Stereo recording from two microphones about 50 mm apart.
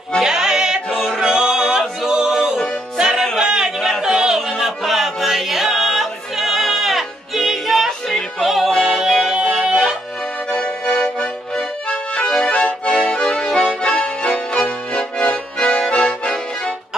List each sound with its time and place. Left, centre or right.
0.2 s music: centre
0.9 s choir: centre
1.2 s music: centre
3.3 s a sound: centre
4.0 s music: centre
10.5 s accordion: centre
15.9 s music: centre